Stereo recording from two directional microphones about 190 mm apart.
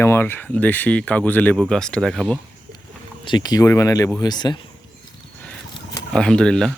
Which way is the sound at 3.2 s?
25° left (ahead or behind).